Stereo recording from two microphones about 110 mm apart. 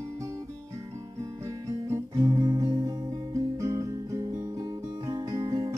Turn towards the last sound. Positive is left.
turn(degrees=-35)  # may be behind; listen again after turning